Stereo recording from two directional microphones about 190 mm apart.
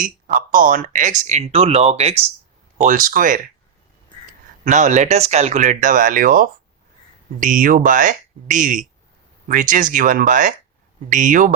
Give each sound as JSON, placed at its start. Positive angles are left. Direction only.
{"t": 0.0, "sound": "speech", "side_deg": -45}
{"t": 4.6, "sound": "speech", "side_deg": -40}